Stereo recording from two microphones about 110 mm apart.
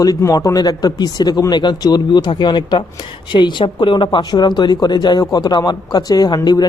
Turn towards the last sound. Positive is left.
turn(degrees=35)  # may be behind; listen again after turning